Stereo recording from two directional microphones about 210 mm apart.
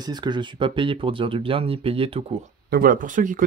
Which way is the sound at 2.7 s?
45° right (ahead or behind).